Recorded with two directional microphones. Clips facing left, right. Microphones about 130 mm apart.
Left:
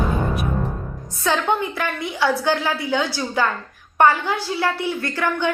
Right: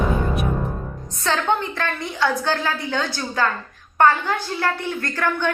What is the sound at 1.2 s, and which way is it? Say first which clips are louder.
A woman's voice: left 1 dB; 10° left (ahead or behind).